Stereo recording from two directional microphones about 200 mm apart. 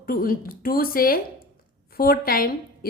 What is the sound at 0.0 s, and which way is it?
A woman's voice, 45° left (ahead or behind).